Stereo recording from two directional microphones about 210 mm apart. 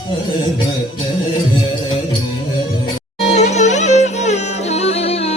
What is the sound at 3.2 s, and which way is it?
Music, 35° left (ahead or behind).